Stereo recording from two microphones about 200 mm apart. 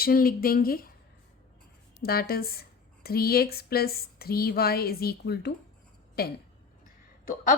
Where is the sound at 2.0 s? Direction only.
50° left (ahead or behind).